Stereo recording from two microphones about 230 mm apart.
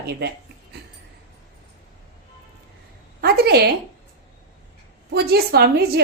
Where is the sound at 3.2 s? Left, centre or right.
Right.